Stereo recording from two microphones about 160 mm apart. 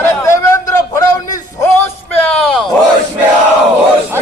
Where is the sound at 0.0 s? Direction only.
15° left (ahead or behind).